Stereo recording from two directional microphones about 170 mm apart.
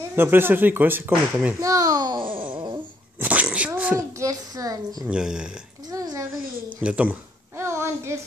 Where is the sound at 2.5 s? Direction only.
25° right (ahead or behind).